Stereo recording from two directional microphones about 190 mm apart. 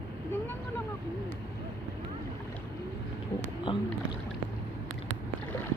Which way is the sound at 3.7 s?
30° left (ahead or behind).